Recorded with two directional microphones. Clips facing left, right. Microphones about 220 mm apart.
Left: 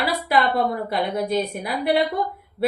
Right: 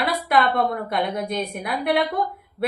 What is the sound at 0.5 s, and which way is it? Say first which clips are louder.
A woman's voice: even; centre (ahead or behind).